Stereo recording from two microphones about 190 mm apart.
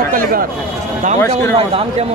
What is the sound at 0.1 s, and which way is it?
Speech, 50° right (ahead or behind).